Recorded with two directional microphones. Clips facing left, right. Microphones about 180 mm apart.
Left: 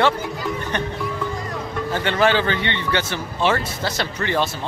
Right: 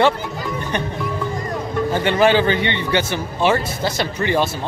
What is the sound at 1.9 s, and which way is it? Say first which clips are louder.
Speech: right 3 dB; 15° right (ahead or behind).